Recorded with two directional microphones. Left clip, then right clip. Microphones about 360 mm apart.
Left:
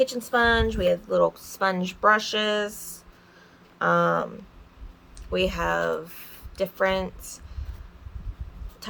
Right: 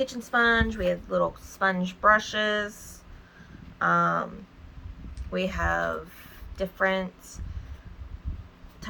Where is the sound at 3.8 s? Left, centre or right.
Left.